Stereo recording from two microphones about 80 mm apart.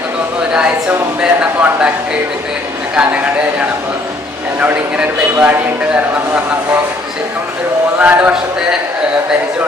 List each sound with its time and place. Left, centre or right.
0.5 s a woman's voice: centre
2.9 s a man's voice: centre
7.9 s a man's voice: centre